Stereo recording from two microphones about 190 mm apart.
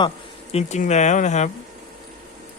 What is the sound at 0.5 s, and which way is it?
Speech, 35° left (ahead or behind).